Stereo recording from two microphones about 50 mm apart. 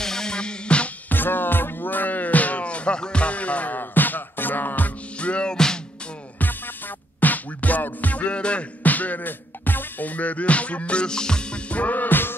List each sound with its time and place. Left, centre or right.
0.0 s music: centre
1.0 s music: left; by 5.8 s centre
7.2 s music: left